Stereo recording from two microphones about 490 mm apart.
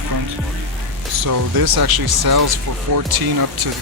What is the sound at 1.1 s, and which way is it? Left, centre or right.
Speech, right.